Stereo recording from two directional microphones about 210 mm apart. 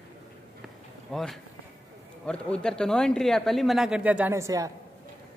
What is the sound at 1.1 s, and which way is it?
Speech, centre (ahead or behind).